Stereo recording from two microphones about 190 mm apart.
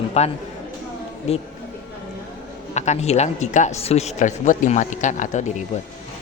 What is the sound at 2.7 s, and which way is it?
Speech, 35° left (ahead or behind).